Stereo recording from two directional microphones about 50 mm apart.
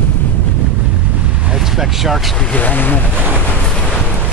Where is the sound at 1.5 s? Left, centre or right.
Centre.